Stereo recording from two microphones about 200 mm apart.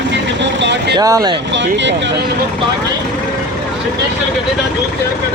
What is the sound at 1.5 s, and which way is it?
Speech, 65° right (ahead or behind).